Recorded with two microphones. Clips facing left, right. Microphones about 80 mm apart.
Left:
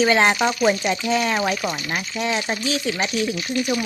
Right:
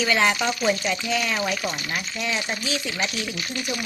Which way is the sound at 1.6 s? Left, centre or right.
Left.